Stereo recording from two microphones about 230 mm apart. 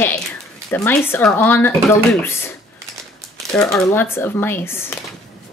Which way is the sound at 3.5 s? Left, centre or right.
Centre.